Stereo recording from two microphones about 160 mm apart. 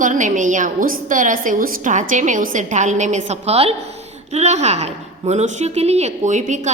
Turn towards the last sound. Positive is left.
turn(degrees=-50)  # may be behind; listen again after turning